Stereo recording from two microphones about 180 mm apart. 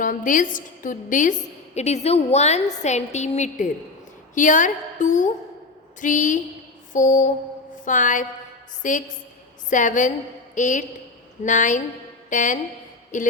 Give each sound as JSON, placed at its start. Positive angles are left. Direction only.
{"t": 0.0, "sound": "a woman's voice", "side_deg": 50}